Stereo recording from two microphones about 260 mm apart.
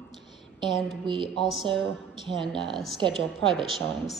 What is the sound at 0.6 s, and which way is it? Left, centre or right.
A woman's voice, centre.